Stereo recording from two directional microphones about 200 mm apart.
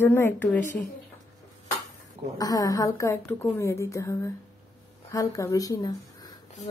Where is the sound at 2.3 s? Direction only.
20° left (ahead or behind).